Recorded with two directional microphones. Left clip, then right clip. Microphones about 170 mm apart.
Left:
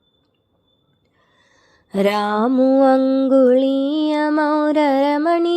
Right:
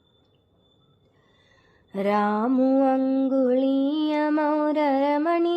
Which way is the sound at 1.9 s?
40° left (ahead or behind).